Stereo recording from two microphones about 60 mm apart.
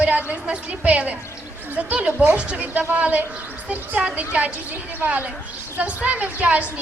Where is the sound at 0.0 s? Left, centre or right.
Right.